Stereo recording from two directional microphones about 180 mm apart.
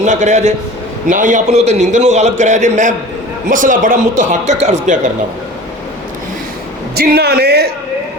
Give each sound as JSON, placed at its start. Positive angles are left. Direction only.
{"t": 0.0, "sound": "a man's voice", "side_deg": -40}
{"t": 6.9, "sound": "speech", "side_deg": -60}